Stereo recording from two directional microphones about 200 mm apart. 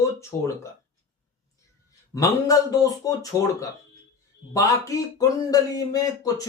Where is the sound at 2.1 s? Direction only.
15° left (ahead or behind).